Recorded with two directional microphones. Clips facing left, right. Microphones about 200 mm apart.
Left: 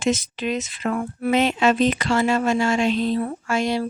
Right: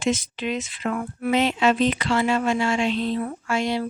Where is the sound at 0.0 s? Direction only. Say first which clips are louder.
Left 2 dB; 40° left (ahead or behind).